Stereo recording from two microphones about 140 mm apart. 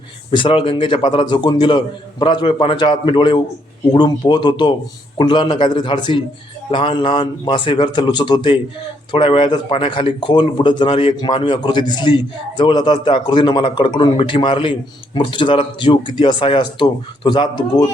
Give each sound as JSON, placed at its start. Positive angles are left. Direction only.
{"t": 0.3, "sound": "a man's voice", "side_deg": 40}